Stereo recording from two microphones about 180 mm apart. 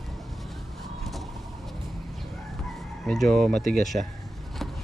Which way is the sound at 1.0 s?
Centre (ahead or behind).